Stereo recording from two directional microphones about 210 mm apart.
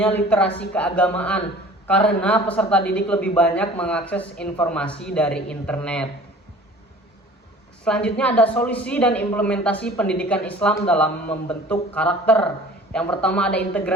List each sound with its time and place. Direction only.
0.0 s speech: 10° left (ahead or behind)
0.4 s speech: 60° left (ahead or behind)
0.7 s speech: 5° left (ahead or behind)
7.9 s speech: 5° left (ahead or behind)